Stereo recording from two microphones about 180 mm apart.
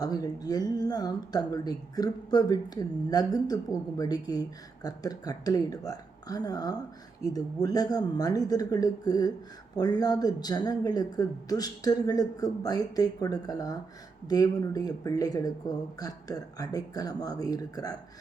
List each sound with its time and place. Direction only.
0.0 s a woman's voice: 20° left (ahead or behind)